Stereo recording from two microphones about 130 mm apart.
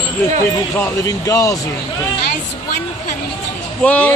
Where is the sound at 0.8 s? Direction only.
25° left (ahead or behind).